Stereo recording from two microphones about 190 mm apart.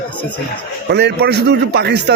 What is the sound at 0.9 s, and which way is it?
Speech, 60° right (ahead or behind).